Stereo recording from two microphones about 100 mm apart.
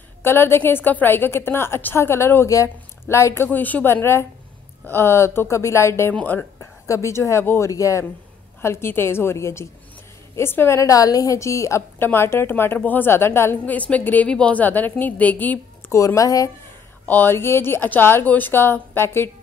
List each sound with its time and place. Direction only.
0.2 s a woman's voice: 25° left (ahead or behind)
3.4 s a woman's voice: 15° left (ahead or behind)
6.9 s a woman's voice: 30° left (ahead or behind)
15.8 s a sound: 20° left (ahead or behind)
16.2 s speech: 35° left (ahead or behind)
17.1 s a woman's voice: 20° left (ahead or behind)